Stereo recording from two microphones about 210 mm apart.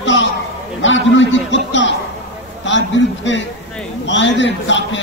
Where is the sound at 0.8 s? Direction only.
60° left (ahead or behind).